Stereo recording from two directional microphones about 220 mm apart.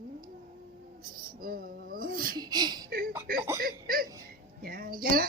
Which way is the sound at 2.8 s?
40° right (ahead or behind).